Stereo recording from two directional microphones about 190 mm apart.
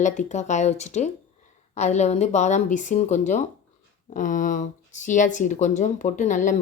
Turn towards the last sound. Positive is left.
turn(degrees=40)  # may be behind; listen again after turning